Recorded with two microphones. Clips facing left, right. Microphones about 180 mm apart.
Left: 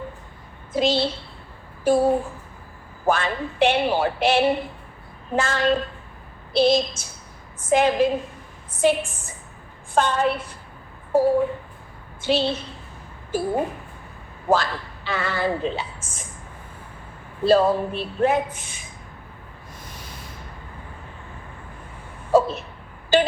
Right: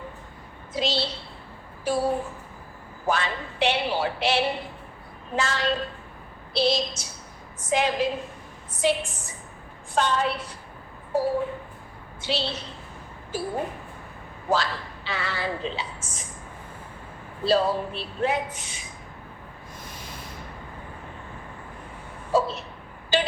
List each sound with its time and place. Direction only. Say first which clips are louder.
0.7 s a woman's voice: left 6 dB; 50° left (ahead or behind)
3.1 s a woman's voice: left 4 dB; 50° left (ahead or behind)
14.5 s a woman's voice: left 4 dB; 50° left (ahead or behind)
17.4 s a woman's voice: left 5 dB; 50° left (ahead or behind)
22.3 s a sound: left 5 dB; 50° left (ahead or behind)